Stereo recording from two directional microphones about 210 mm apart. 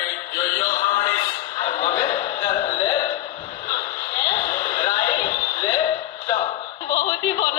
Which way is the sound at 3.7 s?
15° left (ahead or behind).